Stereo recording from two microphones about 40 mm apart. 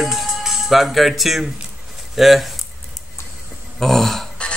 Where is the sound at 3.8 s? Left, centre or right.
Centre.